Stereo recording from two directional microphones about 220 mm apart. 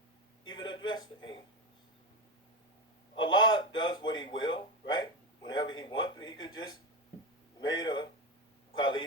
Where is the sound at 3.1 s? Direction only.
20° left (ahead or behind).